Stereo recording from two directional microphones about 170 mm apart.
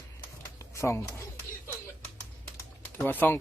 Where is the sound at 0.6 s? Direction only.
15° left (ahead or behind).